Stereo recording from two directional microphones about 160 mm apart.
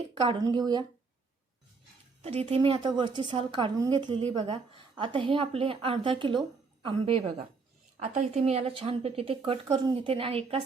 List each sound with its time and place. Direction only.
0.3 s a woman's voice: 25° right (ahead or behind)
2.2 s a woman's voice: 40° right (ahead or behind)